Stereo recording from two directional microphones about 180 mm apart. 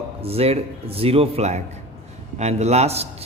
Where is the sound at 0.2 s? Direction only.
35° right (ahead or behind).